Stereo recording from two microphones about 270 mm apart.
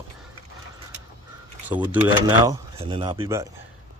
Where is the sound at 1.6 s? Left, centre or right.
Centre.